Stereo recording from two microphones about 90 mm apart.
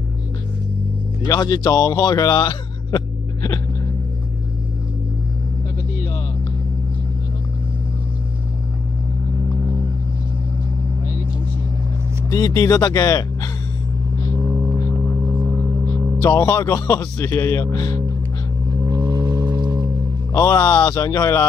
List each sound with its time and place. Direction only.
1.2 s speech: 50° left (ahead or behind)
12.3 s speech: 40° left (ahead or behind)
14.5 s vehicle: 35° right (ahead or behind)
16.2 s speech: 45° left (ahead or behind)
17.2 s speech: 30° left (ahead or behind)
18.8 s vehicle: 45° right (ahead or behind)
20.5 s speech: 25° left (ahead or behind)